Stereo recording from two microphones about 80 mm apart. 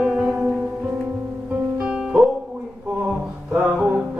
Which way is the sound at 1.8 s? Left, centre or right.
Centre.